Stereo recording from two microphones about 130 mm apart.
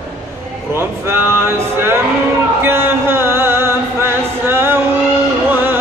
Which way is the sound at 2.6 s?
15° right (ahead or behind).